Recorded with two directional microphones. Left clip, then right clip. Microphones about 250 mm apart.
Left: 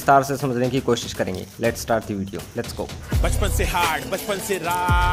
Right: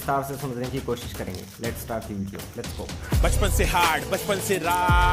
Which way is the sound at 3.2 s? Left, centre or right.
Centre.